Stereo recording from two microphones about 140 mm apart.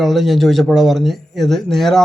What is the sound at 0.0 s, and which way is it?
Speech, centre (ahead or behind).